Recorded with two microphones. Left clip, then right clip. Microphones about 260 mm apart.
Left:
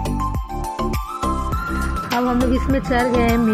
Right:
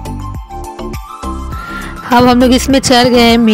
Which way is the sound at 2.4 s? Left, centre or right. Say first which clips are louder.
Right 11 dB; right.